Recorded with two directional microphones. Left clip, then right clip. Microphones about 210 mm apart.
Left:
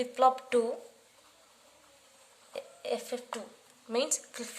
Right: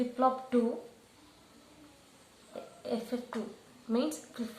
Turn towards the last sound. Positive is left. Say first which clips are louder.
# left 2 dB
turn(degrees=45)  # may be behind; listen again after turning